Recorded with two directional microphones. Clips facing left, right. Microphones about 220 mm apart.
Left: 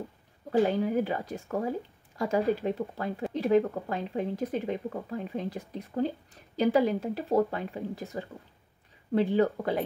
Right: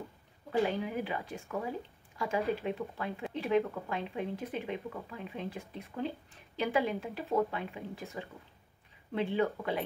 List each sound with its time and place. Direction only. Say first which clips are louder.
0.5 s speech: left 6 dB; 45° left (ahead or behind)
9.1 s speech: left 6 dB; 40° left (ahead or behind)